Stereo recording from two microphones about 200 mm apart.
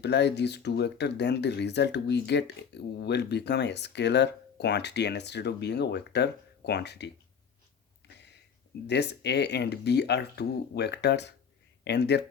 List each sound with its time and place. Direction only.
0.0 s speech: 60° left (ahead or behind)
8.9 s speech: 55° left (ahead or behind)